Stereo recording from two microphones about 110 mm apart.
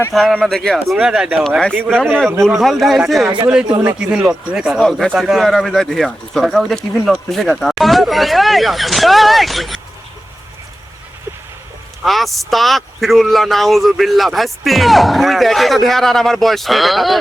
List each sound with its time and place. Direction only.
0.1 s a man's voice: centre (ahead or behind)
1.7 s a man's voice: 15° right (ahead or behind)
2.0 s a man's voice: centre (ahead or behind)
4.9 s a man's voice: 5° left (ahead or behind)
12.0 s a man's voice: centre (ahead or behind)